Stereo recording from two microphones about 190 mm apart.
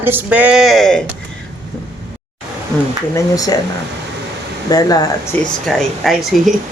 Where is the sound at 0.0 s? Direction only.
10° right (ahead or behind).